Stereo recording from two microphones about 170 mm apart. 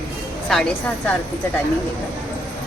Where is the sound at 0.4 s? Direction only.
5° left (ahead or behind).